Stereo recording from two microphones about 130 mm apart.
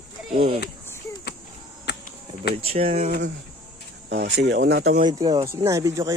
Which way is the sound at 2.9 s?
90° right.